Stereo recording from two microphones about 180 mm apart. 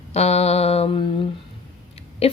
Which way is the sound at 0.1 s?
35° left (ahead or behind).